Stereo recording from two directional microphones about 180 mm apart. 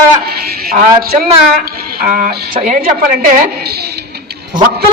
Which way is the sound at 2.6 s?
35° right (ahead or behind).